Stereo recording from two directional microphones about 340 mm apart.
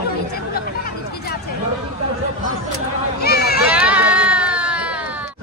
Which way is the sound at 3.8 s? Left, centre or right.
Centre.